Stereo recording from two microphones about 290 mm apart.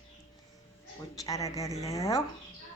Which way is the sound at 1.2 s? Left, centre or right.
Centre.